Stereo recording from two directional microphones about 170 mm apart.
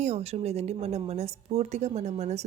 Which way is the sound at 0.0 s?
40° right (ahead or behind).